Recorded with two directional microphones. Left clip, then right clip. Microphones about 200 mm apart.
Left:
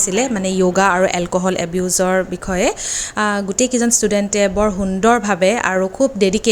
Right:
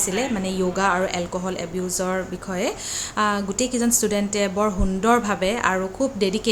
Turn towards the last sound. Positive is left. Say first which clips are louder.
# left 7 dB
turn(degrees=30)  # may be behind; listen again after turning